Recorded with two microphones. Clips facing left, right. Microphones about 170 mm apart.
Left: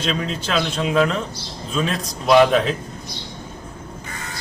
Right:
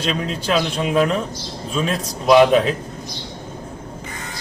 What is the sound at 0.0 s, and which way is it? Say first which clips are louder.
A man's voice: right 1 dB; centre (ahead or behind).